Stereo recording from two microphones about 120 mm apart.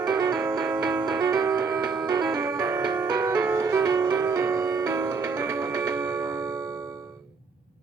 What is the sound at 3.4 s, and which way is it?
Music, 25° right (ahead or behind).